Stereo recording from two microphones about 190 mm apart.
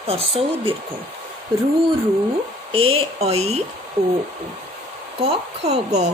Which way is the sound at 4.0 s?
20° right (ahead or behind).